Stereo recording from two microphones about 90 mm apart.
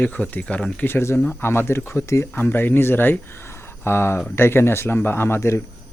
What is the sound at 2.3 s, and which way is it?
Speech, 20° left (ahead or behind).